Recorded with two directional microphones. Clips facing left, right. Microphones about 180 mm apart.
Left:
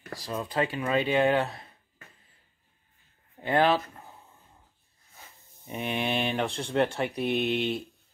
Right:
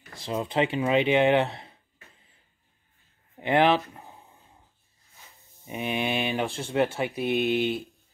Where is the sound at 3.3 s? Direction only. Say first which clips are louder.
Right 2 dB; 20° right (ahead or behind).